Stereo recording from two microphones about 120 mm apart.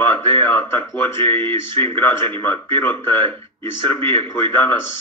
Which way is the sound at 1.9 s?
20° left (ahead or behind).